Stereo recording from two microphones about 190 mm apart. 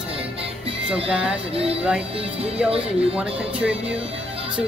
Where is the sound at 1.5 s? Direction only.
30° right (ahead or behind).